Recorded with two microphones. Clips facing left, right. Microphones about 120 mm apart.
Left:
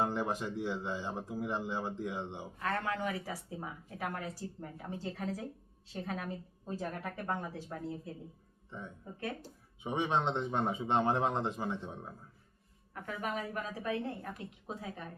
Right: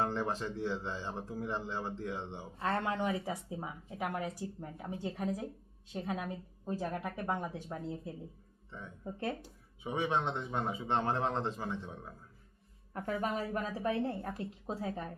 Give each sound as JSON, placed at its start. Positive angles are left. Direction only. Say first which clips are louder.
{"t": 0.0, "sound": "speech", "louder": "left 1 dB", "side_deg": 15}
{"t": 2.6, "sound": "a woman's voice", "louder": "right 2 dB", "side_deg": -25}
{"t": 9.8, "sound": "speech", "louder": "left 1 dB", "side_deg": 20}
{"t": 12.9, "sound": "a woman's voice", "louder": "right 3 dB", "side_deg": -30}